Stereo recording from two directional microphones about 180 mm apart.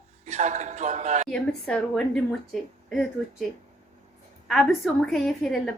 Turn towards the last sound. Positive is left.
turn(degrees=5)  # may be behind; listen again after turning